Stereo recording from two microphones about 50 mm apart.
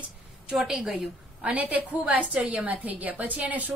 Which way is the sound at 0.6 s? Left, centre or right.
Centre.